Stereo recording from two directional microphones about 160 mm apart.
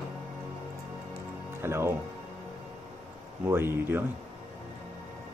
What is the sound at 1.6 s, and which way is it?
Speech, 15° right (ahead or behind).